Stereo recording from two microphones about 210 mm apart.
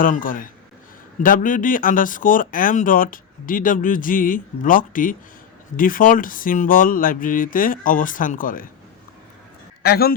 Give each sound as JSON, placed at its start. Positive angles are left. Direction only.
{"t": 0.0, "sound": "speech", "side_deg": 40}
{"t": 9.8, "sound": "a man's voice", "side_deg": 45}